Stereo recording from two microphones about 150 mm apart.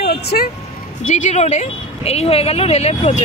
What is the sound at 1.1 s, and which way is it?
Speech, 55° left (ahead or behind).